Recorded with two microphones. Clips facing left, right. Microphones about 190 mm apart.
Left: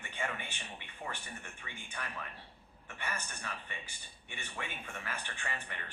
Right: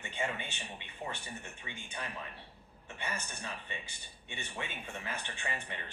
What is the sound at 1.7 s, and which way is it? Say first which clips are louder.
Speech: right 3 dB; 15° right (ahead or behind).